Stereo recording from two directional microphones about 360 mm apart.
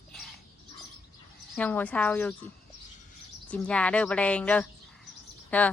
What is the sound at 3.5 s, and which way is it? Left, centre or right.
Speech, centre.